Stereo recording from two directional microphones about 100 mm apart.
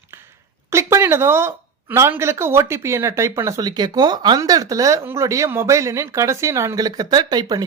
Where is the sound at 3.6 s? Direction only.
45° right (ahead or behind).